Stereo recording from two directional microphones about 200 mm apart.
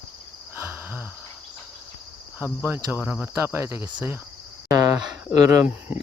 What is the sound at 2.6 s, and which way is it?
Speech, 10° right (ahead or behind).